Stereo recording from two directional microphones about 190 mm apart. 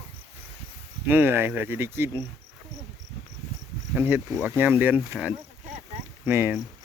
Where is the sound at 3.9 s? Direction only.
10° right (ahead or behind).